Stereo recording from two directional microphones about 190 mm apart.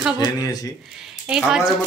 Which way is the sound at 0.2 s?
20° left (ahead or behind).